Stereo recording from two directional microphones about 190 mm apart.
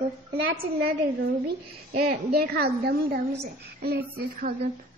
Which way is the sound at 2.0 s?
55° right (ahead or behind).